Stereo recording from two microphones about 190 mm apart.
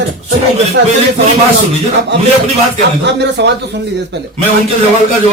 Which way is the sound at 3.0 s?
65° right (ahead or behind).